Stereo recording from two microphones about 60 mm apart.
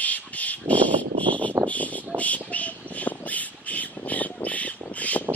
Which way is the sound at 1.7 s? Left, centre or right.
Left.